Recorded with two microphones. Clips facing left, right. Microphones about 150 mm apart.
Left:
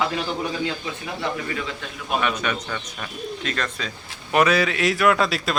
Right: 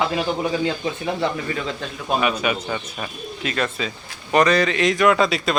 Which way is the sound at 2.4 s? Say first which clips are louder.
Right 4 dB; 10° right (ahead or behind).